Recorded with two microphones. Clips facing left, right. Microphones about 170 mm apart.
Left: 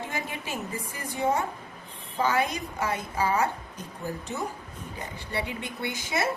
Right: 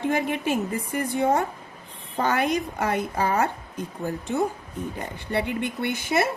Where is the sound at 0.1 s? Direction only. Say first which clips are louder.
Right 10 dB; 60° right (ahead or behind).